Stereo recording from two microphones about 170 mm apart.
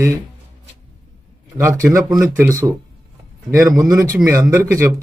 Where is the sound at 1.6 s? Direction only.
20° right (ahead or behind).